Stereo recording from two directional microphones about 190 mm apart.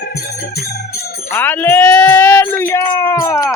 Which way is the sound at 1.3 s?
10° left (ahead or behind).